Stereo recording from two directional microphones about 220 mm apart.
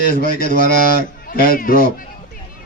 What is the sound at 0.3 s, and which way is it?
Speech, 40° left (ahead or behind).